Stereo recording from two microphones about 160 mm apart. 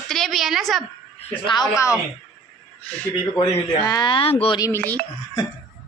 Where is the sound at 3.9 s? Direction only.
30° left (ahead or behind).